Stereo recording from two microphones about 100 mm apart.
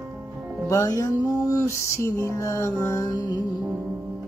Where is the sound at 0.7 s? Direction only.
35° left (ahead or behind).